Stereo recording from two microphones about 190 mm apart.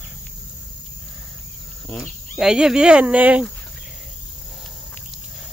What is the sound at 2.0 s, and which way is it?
Speech, 5° right (ahead or behind).